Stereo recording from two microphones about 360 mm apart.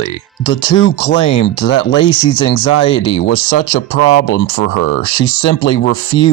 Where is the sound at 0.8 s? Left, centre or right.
Left.